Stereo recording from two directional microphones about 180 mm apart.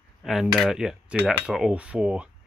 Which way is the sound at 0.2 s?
Centre (ahead or behind).